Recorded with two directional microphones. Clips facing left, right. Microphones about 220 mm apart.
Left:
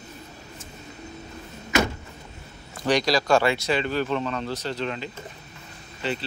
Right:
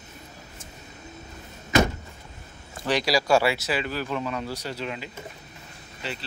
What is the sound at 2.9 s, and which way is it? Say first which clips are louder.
Speech: left 1 dB; 5° right (ahead or behind).